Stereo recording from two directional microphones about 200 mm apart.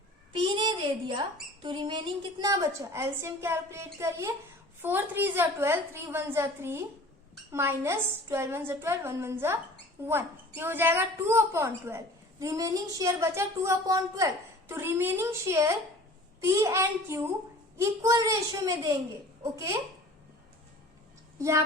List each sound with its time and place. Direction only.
0.3 s speech: 25° right (ahead or behind)
21.3 s speech: 15° right (ahead or behind)